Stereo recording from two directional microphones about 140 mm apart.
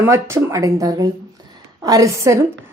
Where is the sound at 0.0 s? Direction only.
20° right (ahead or behind).